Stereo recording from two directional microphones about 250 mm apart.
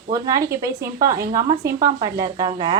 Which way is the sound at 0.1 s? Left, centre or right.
Centre.